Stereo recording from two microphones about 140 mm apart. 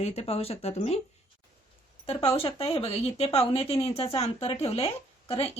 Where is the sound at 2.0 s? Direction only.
40° left (ahead or behind).